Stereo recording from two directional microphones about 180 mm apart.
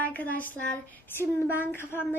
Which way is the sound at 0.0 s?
10° left (ahead or behind).